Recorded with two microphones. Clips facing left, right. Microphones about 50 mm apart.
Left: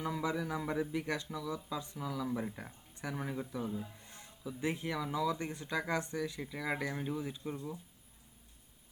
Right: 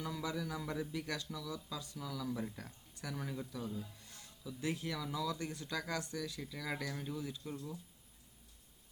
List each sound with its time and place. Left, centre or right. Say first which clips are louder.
0.0 s speech: left 5 dB; left